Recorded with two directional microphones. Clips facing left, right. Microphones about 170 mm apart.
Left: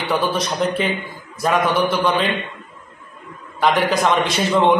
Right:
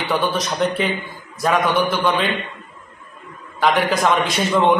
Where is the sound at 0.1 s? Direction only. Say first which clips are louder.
Left 1 dB; centre (ahead or behind).